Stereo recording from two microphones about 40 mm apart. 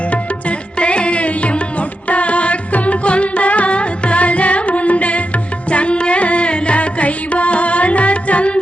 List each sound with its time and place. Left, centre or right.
0.8 s music: left